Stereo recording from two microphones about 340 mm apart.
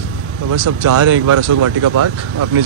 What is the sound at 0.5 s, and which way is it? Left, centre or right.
Speech, right.